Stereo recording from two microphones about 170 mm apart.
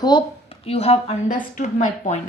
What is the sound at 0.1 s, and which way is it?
Speech, 25° left (ahead or behind).